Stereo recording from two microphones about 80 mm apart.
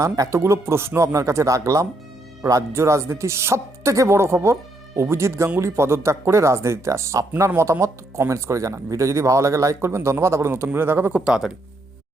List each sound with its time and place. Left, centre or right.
0.0 s speech: right
11.2 s speech: centre